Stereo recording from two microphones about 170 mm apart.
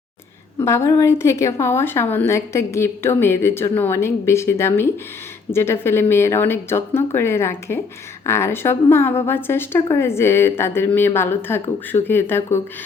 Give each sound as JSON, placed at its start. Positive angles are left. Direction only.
{"t": 0.6, "sound": "a woman's voice", "side_deg": 15}